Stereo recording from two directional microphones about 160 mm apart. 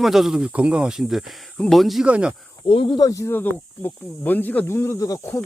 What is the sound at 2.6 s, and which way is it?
Speech, 30° left (ahead or behind).